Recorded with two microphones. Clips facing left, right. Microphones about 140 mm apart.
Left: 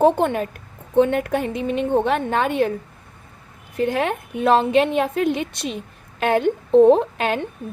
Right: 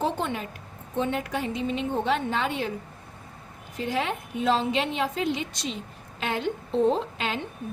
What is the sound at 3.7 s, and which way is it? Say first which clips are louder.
A woman's voice: left 7 dB; 55° left (ahead or behind).